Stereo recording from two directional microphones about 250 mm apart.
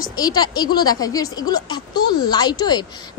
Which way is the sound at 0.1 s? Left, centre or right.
Centre.